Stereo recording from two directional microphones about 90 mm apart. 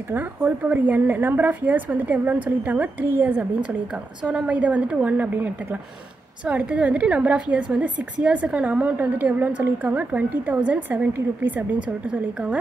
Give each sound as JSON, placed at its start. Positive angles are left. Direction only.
{"t": 0.1, "sound": "a woman's voice", "side_deg": -20}